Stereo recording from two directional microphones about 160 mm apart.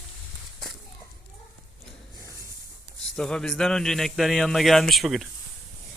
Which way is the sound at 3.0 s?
5° left (ahead or behind).